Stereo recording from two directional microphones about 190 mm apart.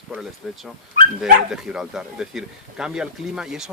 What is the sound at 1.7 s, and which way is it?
Speech, 5° right (ahead or behind).